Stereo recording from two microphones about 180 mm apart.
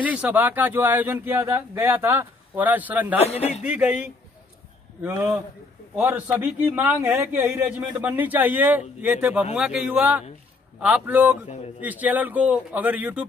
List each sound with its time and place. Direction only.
0.0 s a man's voice: 10° right (ahead or behind)
3.2 s speech: 35° left (ahead or behind)
3.6 s a man's voice: 5° right (ahead or behind)
11.4 s speech: 40° left (ahead or behind)
11.8 s a man's voice: 10° right (ahead or behind)